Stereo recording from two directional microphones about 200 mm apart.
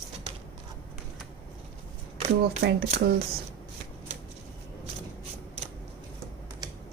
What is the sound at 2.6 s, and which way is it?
Speech, 50° right (ahead or behind).